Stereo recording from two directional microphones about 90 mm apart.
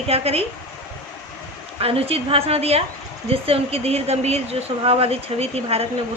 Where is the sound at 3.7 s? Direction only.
90° right.